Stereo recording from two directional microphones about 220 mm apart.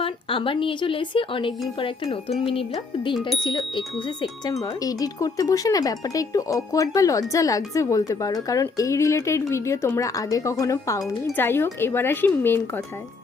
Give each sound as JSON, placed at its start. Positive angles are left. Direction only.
{"t": 0.0, "sound": "a woman's voice", "side_deg": 25}